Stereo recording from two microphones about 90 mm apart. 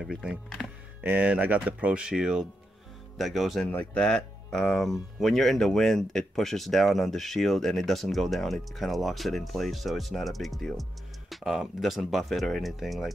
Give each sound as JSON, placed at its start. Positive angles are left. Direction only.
{"t": 0.0, "sound": "speech", "side_deg": -10}